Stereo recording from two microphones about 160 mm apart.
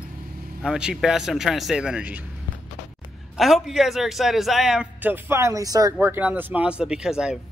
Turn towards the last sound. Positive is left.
turn(degrees=-5)  # may be behind; listen again after turning